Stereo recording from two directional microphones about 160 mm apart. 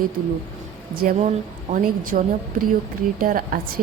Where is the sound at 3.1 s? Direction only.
60° right (ahead or behind).